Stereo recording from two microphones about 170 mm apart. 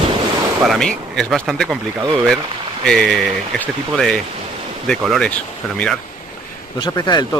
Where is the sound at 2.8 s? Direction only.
5° left (ahead or behind).